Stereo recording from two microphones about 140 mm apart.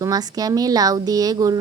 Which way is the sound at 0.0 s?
25° right (ahead or behind).